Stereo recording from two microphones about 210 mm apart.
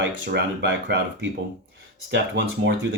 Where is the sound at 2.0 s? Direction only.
55° right (ahead or behind).